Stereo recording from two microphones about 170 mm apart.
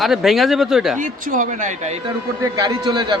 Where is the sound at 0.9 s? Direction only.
50° right (ahead or behind).